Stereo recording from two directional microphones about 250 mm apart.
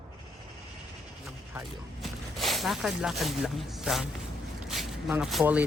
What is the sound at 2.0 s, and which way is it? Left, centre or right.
Speech, centre.